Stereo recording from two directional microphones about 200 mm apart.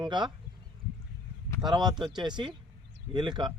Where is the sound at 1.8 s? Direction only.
20° right (ahead or behind).